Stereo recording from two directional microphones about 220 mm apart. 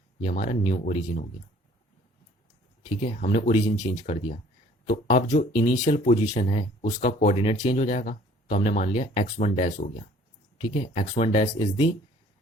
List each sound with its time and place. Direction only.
0.3 s speech: 35° left (ahead or behind)
3.0 s speech: 35° left (ahead or behind)